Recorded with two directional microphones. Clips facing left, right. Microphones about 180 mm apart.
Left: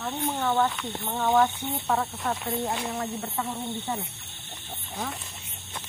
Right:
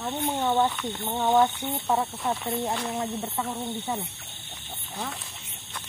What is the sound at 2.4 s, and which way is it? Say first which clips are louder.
Speech: right 1 dB; centre (ahead or behind).